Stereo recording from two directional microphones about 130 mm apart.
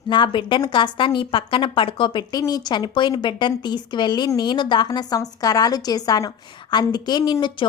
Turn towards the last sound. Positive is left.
turn(degrees=35)  # may be behind; listen again after turning